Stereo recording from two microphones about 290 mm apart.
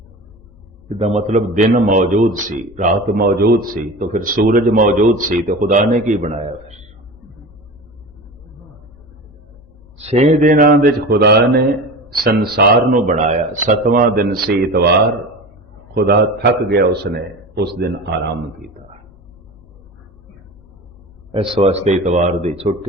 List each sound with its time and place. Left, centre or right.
0.9 s a man's voice: right
10.0 s a man's voice: right
16.0 s a man's voice: right
21.5 s a man's voice: right